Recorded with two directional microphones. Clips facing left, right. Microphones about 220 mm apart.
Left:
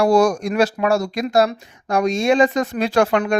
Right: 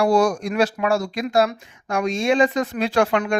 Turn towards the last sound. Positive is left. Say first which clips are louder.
# left 2 dB
turn(degrees=40)  # may be behind; listen again after turning